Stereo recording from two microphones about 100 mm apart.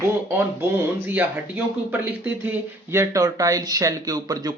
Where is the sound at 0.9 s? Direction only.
20° right (ahead or behind).